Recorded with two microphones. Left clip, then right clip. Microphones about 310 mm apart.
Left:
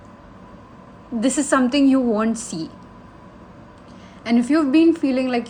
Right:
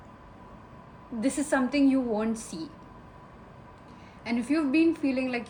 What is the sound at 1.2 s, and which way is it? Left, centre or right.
A woman's voice, left.